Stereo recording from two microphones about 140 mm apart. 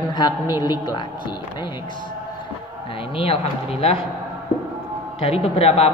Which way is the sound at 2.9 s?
40° left (ahead or behind).